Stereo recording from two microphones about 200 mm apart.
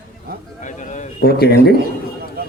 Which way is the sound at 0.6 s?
35° left (ahead or behind).